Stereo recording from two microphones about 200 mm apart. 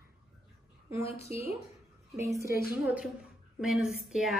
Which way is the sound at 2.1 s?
15° right (ahead or behind).